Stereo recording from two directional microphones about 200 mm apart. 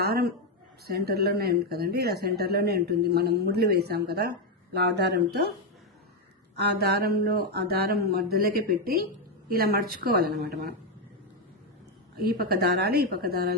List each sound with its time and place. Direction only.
0.0 s a woman's voice: 50° right (ahead or behind)
6.7 s speech: 50° right (ahead or behind)
12.1 s speech: 50° right (ahead or behind)